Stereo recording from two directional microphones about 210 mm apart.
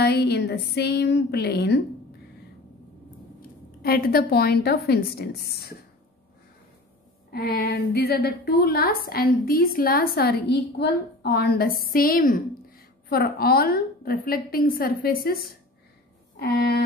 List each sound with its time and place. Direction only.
0.0 s a woman's voice: 50° left (ahead or behind)
3.8 s a woman's voice: 45° left (ahead or behind)
7.2 s a woman's voice: 45° left (ahead or behind)